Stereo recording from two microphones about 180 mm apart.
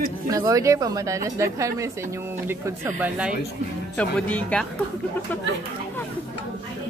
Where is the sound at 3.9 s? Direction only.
5° left (ahead or behind).